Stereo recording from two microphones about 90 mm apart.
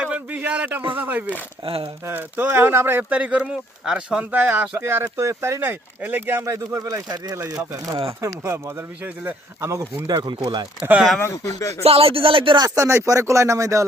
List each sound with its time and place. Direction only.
0.0 s a man's voice: 10° right (ahead or behind)
1.6 s speech: 90° right
2.0 s speech: 20° right (ahead or behind)
5.0 s speech: 35° right (ahead or behind)
6.4 s speech: 35° right (ahead or behind)
7.6 s speech: 35° right (ahead or behind)
10.1 s speech: 50° right (ahead or behind)
11.2 s speech: 35° left (ahead or behind)
11.8 s speech: 90° right
12.5 s speech: 45° right (ahead or behind)
12.8 s speech: 30° right (ahead or behind)